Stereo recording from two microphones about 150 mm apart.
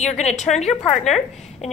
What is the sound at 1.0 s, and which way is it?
Speech, centre (ahead or behind).